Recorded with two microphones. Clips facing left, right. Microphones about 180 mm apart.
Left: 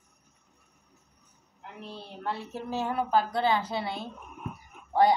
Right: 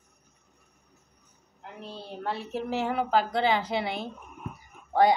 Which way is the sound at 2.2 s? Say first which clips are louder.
Right 3 dB; 70° right (ahead or behind).